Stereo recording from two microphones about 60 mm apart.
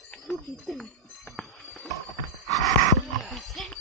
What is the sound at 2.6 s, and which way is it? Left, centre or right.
Dog, centre.